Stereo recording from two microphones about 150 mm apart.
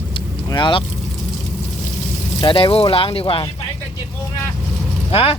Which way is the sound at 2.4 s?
35° left (ahead or behind).